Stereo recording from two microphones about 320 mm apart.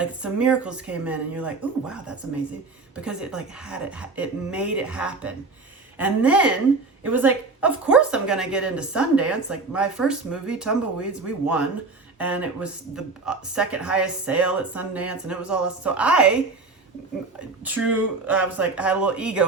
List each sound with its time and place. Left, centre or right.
0.0 s a woman's voice: centre
17.7 s a woman's voice: centre